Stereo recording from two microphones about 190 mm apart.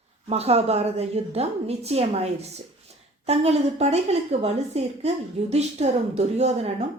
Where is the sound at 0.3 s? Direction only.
30° right (ahead or behind).